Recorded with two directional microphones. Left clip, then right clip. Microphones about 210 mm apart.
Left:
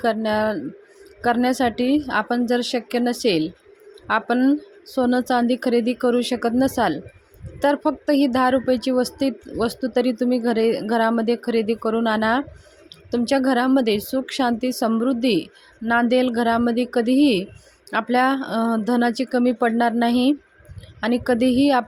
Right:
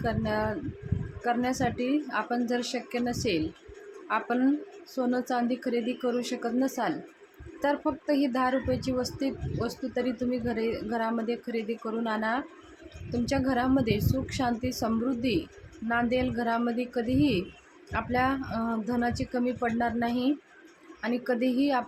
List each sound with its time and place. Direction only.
0.0 s speech: 40° left (ahead or behind)